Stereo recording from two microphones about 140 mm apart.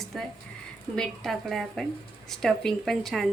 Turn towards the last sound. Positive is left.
turn(degrees=0)  # may be behind; listen again after turning